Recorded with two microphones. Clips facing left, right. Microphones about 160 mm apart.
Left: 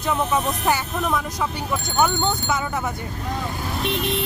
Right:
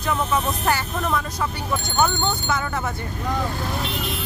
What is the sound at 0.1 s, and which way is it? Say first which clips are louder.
Speech: left 1 dB; 10° left (ahead or behind).